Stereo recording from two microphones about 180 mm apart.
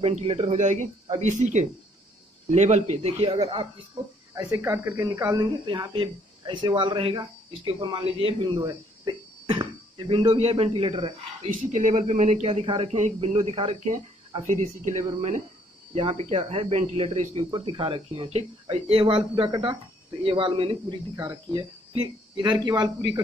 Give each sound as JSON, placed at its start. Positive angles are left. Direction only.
{"t": 0.0, "sound": "a man's voice", "side_deg": -35}
{"t": 11.7, "sound": "a man's voice", "side_deg": -40}